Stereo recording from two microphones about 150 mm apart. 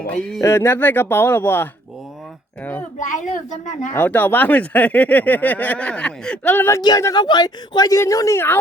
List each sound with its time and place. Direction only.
0.1 s speech: 5° left (ahead or behind)
3.9 s speech: 10° left (ahead or behind)